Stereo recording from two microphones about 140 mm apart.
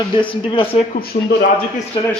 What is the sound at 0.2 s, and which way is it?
Speech, 35° left (ahead or behind).